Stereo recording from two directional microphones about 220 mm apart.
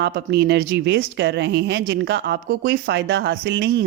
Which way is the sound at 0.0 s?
50° right (ahead or behind).